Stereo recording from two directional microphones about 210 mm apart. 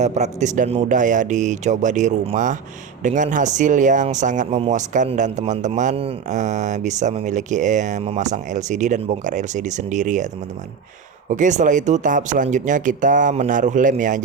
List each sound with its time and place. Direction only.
0.0 s speech: 35° right (ahead or behind)
11.3 s speech: 35° right (ahead or behind)